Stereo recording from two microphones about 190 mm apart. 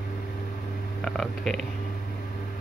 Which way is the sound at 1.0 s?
Centre (ahead or behind).